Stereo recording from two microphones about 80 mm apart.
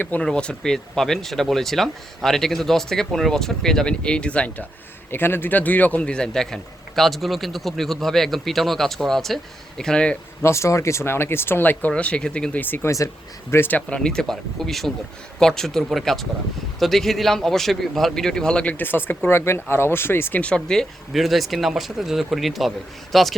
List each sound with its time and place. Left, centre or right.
0.2 s speech: centre
5.1 s a man's voice: left; by 10.2 s centre
10.4 s speech: left; by 12.5 s centre
12.5 s speech: left
14.0 s a man's voice: centre; by 20.4 s left
20.4 s speech: centre